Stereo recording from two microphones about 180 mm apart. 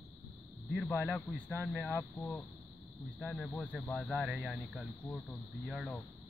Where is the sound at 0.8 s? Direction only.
15° left (ahead or behind).